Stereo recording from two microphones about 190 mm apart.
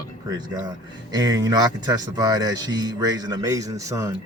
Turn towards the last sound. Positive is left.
turn(degrees=-15)  # may be behind; listen again after turning